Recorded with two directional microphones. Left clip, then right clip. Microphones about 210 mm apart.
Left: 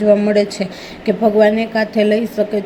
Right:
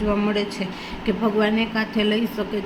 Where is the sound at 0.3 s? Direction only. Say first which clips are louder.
Left 9 dB; 20° left (ahead or behind).